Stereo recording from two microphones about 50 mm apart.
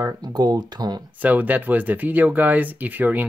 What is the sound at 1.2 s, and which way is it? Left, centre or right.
Speech, right.